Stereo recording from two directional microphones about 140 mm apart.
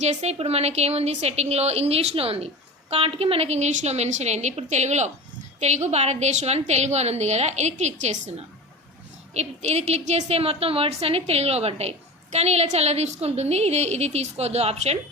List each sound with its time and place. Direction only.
0.0 s a woman's voice: 55° right (ahead or behind)
9.3 s a woman's voice: 50° right (ahead or behind)